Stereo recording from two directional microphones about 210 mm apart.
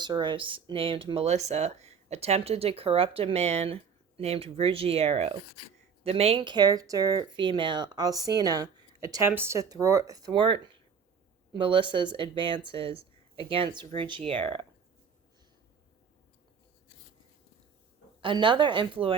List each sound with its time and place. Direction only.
0.0 s speech: 20° right (ahead or behind)
18.2 s speech: 25° right (ahead or behind)